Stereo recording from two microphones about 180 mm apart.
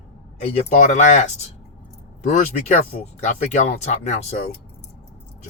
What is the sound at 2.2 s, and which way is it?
Speech, 40° left (ahead or behind).